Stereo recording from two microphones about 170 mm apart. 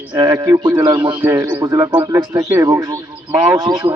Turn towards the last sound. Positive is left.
turn(degrees=-20)  # may be behind; listen again after turning